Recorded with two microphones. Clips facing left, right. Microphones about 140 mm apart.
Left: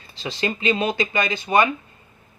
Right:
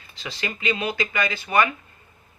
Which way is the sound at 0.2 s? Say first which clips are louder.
Left 6 dB; 25° left (ahead or behind).